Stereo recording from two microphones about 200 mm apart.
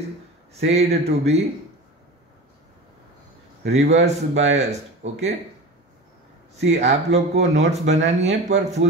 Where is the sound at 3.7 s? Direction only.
35° right (ahead or behind).